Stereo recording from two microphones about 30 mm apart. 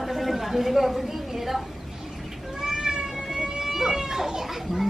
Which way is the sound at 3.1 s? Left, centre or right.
Centre.